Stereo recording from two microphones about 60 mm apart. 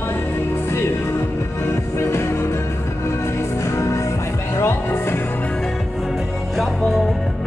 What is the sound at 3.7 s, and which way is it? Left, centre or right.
Music, left.